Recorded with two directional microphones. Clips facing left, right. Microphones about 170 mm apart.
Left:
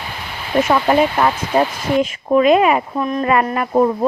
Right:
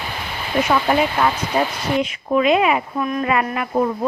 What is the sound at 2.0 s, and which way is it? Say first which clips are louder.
Speech: left 5 dB; 40° left (ahead or behind).